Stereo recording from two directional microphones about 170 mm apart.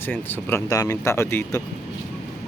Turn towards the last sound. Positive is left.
turn(degrees=15)  # may be behind; listen again after turning